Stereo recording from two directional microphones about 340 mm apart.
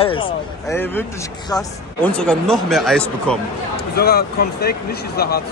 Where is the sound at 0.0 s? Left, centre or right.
Centre.